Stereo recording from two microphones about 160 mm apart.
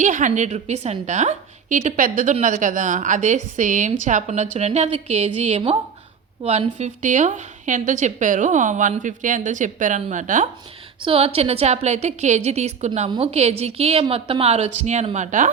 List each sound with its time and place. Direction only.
0.0 s a woman's voice: 50° right (ahead or behind)
11.0 s a woman's voice: 35° right (ahead or behind)